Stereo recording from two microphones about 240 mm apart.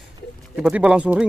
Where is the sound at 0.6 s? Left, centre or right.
Centre.